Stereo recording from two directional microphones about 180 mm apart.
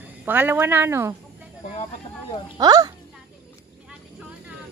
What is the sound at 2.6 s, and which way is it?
Speech, 20° right (ahead or behind).